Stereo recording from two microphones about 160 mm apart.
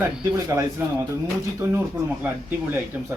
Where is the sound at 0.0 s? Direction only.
15° right (ahead or behind).